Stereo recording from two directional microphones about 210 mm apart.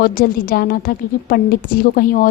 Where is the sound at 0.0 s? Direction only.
40° left (ahead or behind).